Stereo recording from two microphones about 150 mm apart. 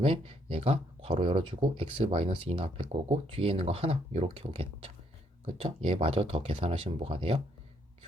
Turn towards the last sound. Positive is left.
turn(degrees=-40)  # may be behind; listen again after turning